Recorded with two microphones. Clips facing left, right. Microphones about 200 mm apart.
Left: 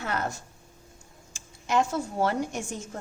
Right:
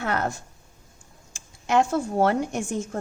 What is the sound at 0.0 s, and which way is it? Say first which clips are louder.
A woman's voice: right 4 dB; 60° right (ahead or behind).